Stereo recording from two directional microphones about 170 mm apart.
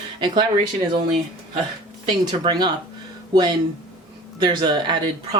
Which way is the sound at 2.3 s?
25° right (ahead or behind).